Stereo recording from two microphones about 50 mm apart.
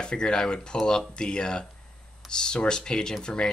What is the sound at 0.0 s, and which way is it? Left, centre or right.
Speech, centre.